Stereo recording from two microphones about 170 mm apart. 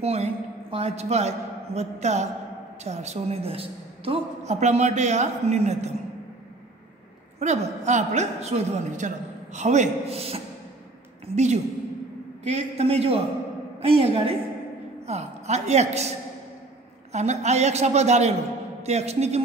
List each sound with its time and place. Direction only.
0.0 s a man's voice: 40° right (ahead or behind)
7.3 s a woman's voice: 40° right (ahead or behind)